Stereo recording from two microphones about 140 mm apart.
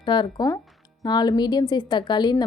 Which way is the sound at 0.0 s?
35° left (ahead or behind).